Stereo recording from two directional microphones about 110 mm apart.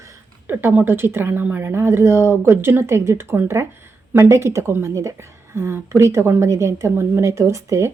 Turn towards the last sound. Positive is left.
turn(degrees=-30)  # may be behind; listen again after turning